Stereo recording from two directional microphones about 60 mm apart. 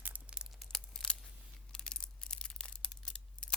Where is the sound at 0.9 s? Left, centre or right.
Centre.